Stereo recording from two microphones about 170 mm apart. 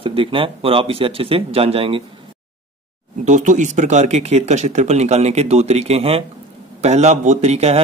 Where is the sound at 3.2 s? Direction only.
45° right (ahead or behind).